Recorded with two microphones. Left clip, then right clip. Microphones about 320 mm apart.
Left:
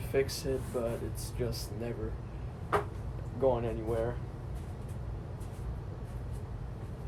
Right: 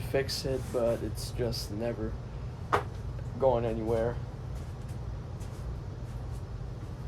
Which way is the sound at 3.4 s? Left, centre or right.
Right.